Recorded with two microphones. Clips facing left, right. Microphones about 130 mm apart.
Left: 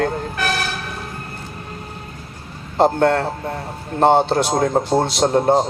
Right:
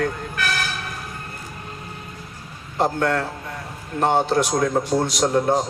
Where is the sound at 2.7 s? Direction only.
30° left (ahead or behind).